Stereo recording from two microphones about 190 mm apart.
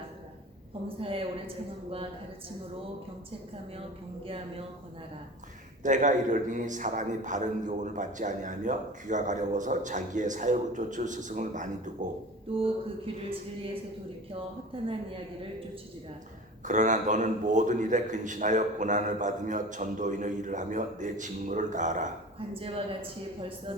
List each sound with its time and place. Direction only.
0.9 s speech: 30° right (ahead or behind)
5.8 s a man's voice: 40° right (ahead or behind)
14.7 s speech: 30° right (ahead or behind)
16.6 s a man's voice: 40° right (ahead or behind)
22.4 s speech: 30° right (ahead or behind)